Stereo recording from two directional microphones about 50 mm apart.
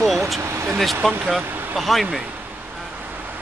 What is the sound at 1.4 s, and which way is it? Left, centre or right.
Speech, right.